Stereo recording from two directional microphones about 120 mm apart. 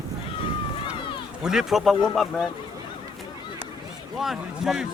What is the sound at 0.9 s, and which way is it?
Run, 40° left (ahead or behind).